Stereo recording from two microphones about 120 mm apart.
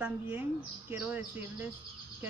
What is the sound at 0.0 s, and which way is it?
Speech, 15° right (ahead or behind).